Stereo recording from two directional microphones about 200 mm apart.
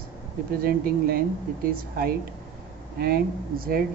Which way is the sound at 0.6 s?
50° right (ahead or behind).